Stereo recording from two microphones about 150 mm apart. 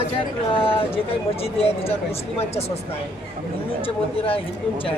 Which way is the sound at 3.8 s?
40° left (ahead or behind).